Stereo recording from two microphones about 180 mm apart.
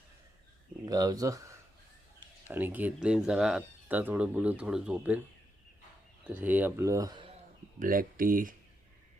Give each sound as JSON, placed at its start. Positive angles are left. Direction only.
{"t": 0.9, "sound": "speech", "side_deg": -20}
{"t": 6.2, "sound": "speech", "side_deg": -10}
{"t": 7.8, "sound": "speech", "side_deg": -50}